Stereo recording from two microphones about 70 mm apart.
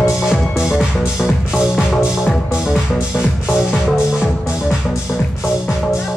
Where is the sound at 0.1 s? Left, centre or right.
Centre.